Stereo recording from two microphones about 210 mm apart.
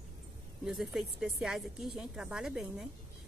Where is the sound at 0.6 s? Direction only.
Centre (ahead or behind).